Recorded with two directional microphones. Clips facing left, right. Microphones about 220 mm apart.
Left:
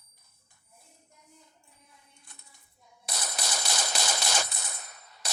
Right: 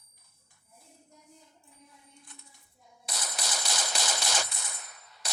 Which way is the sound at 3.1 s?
45° left (ahead or behind).